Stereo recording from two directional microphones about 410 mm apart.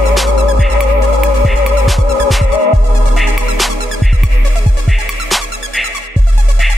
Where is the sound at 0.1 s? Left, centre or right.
Centre.